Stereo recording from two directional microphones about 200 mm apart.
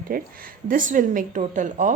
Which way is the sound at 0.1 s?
45° right (ahead or behind).